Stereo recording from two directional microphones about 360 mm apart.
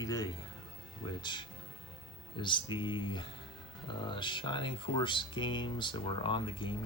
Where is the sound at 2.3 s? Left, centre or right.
Centre.